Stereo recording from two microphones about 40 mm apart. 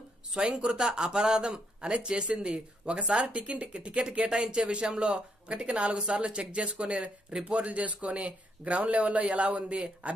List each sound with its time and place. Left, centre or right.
0.3 s a man's voice: right